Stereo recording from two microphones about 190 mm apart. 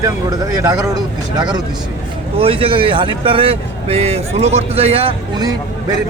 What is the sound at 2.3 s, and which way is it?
A man's voice, 30° right (ahead or behind).